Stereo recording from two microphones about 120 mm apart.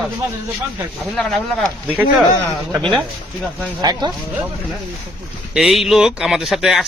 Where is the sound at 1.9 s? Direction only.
15° right (ahead or behind).